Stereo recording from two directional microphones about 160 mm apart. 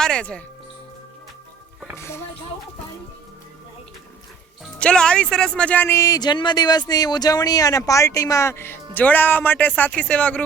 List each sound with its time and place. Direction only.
0.0 s speech: 5° left (ahead or behind)
2.0 s speech: 15° left (ahead or behind)
4.6 s speech: 5° left (ahead or behind)